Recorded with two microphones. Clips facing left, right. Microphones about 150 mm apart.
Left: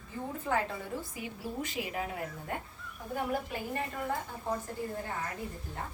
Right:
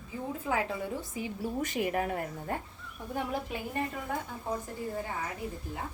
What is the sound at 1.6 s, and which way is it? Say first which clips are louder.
Speech: right 6 dB; 50° right (ahead or behind).